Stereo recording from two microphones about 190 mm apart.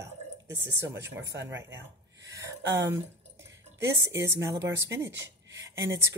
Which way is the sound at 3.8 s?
15° right (ahead or behind).